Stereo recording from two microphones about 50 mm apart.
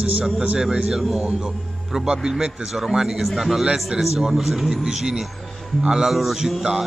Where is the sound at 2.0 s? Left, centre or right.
Centre.